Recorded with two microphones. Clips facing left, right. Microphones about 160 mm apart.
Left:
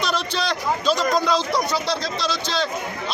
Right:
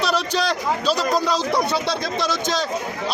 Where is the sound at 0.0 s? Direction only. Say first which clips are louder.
Right 3 dB; 5° right (ahead or behind).